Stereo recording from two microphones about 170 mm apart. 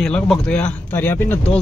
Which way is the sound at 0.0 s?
5° left (ahead or behind).